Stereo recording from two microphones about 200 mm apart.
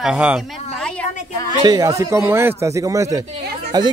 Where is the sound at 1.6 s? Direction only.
20° right (ahead or behind).